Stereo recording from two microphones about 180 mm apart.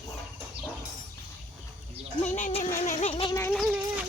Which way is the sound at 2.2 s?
40° left (ahead or behind).